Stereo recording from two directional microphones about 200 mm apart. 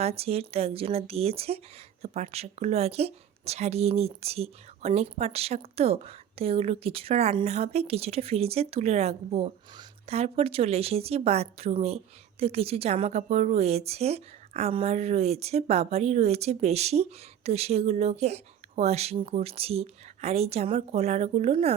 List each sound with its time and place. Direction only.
0.0 s a woman's voice: 30° right (ahead or behind)